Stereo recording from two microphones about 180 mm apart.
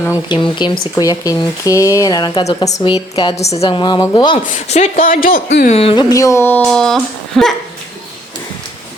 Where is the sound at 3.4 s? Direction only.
35° left (ahead or behind); by 5.5 s 50° left (ahead or behind).